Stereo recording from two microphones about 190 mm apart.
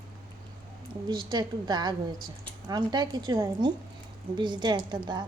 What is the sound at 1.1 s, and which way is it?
A woman's voice, 25° right (ahead or behind).